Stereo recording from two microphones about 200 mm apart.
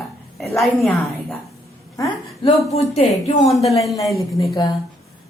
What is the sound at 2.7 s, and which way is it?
Speech, 30° left (ahead or behind).